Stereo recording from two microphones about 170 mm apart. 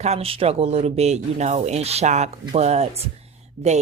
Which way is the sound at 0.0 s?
35° right (ahead or behind).